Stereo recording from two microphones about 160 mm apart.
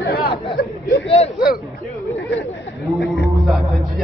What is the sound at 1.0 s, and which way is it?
Speech, 40° left (ahead or behind).